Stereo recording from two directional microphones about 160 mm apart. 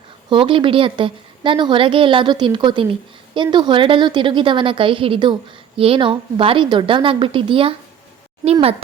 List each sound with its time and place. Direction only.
0.3 s a woman's voice: 30° right (ahead or behind)